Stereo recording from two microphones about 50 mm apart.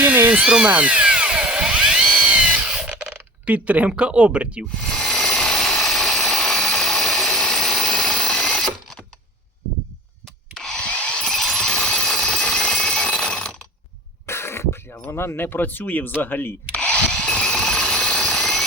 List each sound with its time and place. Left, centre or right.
0.0 s a sound: right
0.4 s speech: centre
0.7 s drill: right
3.4 s speech: right
4.7 s helicopter: centre
10.5 s wood: centre
11.3 s a sound: centre
12.2 s alarm clock: centre
14.3 s cough: left
15.1 s speech: left
16.7 s wood: left
17.6 s a sound: centre